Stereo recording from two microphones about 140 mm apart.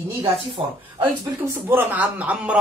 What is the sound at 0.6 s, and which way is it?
Speech, 40° right (ahead or behind).